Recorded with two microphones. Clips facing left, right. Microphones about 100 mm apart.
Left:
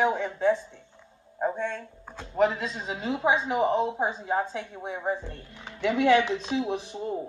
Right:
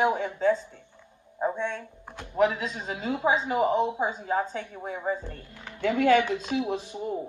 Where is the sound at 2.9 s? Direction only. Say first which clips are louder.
Even; 25° left (ahead or behind).